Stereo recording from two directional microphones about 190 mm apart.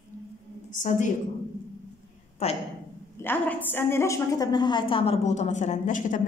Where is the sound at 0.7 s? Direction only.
40° left (ahead or behind).